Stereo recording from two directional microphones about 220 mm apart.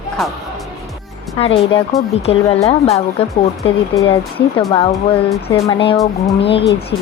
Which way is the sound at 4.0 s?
20° left (ahead or behind).